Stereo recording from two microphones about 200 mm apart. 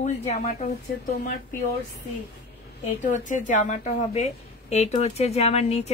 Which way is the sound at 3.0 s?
40° left (ahead or behind).